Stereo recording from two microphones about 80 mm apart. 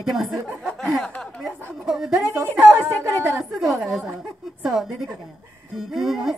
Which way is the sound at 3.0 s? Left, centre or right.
Right.